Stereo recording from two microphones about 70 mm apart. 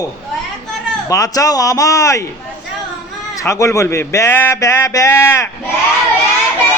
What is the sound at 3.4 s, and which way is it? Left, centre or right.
A man's voice, left.